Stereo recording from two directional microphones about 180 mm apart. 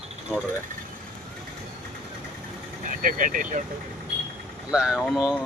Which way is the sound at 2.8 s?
45° right (ahead or behind).